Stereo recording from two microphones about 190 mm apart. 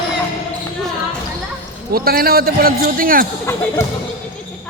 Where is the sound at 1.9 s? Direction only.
50° right (ahead or behind).